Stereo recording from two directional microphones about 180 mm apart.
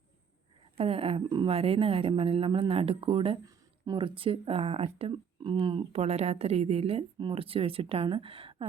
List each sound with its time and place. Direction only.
0.8 s speech: 30° right (ahead or behind)